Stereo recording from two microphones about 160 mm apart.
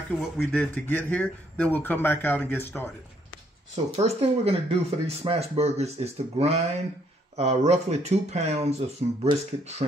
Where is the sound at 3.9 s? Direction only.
40° right (ahead or behind).